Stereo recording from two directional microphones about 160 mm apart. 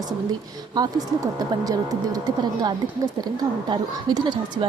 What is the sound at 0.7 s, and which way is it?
Speech, 25° right (ahead or behind).